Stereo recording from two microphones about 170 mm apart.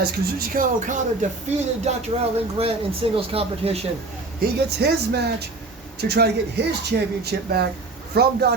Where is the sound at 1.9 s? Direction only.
40° right (ahead or behind).